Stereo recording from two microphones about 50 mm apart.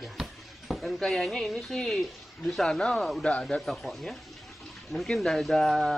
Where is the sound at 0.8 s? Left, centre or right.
Centre.